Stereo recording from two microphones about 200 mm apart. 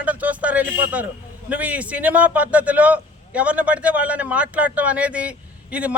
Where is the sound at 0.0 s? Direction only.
5° right (ahead or behind).